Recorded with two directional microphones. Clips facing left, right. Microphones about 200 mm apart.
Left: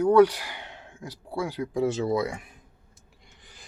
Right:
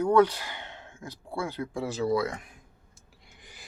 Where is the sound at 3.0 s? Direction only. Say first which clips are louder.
Left 1 dB; centre (ahead or behind).